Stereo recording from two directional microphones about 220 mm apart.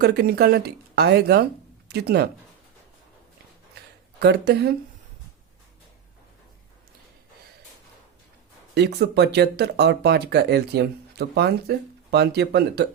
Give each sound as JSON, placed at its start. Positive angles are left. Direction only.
{"t": 0.0, "sound": "speech", "side_deg": -45}
{"t": 4.2, "sound": "speech", "side_deg": -50}
{"t": 8.7, "sound": "speech", "side_deg": -50}